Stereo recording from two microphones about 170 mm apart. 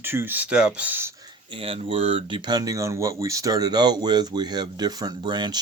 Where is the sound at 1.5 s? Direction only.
35° right (ahead or behind).